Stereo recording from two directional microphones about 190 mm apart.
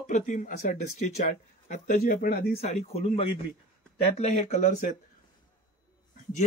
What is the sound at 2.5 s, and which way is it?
Speech, 35° left (ahead or behind).